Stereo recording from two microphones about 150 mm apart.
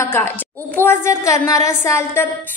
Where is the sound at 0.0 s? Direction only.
15° left (ahead or behind).